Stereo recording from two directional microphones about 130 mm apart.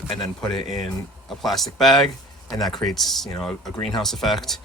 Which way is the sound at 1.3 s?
Centre (ahead or behind).